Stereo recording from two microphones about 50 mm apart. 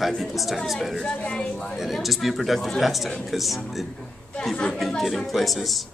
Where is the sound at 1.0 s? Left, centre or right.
Centre.